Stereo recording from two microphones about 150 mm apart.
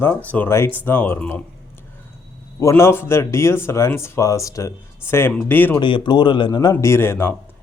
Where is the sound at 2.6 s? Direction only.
20° left (ahead or behind).